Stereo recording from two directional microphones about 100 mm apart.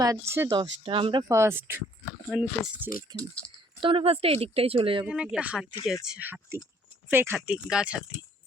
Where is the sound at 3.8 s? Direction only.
70° right (ahead or behind).